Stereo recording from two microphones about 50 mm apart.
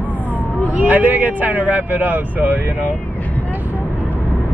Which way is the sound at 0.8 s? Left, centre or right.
Right.